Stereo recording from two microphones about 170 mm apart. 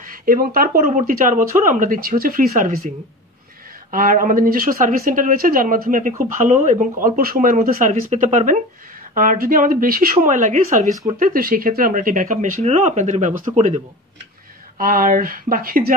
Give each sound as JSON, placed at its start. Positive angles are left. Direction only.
{"t": 0.0, "sound": "speech", "side_deg": -55}
{"t": 3.9, "sound": "speech", "side_deg": -55}
{"t": 14.8, "sound": "speech", "side_deg": -55}